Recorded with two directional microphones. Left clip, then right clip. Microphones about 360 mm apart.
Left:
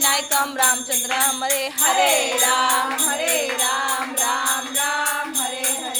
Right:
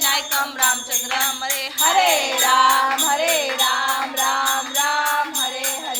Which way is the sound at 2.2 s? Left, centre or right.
Centre.